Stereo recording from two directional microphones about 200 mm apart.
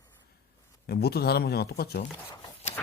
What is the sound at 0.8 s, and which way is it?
Speech, 50° left (ahead or behind).